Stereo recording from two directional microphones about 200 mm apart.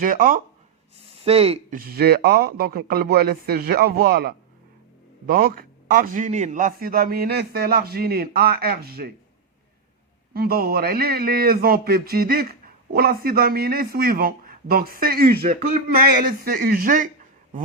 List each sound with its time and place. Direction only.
0.0 s speech: 40° right (ahead or behind)
1.1 s speech: 30° right (ahead or behind)
1.7 s speech: 50° right (ahead or behind)
10.3 s speech: 50° right (ahead or behind)